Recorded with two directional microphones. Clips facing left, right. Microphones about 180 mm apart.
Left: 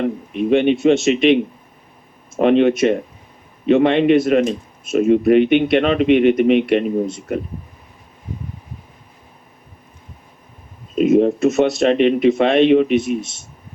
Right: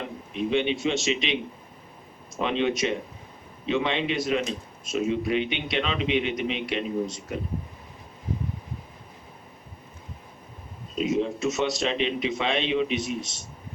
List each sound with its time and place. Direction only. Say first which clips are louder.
0.0 s a man's voice: left 10 dB; 55° left (ahead or behind)
10.9 s speech: left 12 dB; 55° left (ahead or behind)